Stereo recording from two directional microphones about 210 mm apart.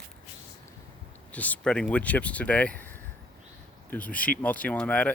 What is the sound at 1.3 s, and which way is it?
Speech, 5° left (ahead or behind).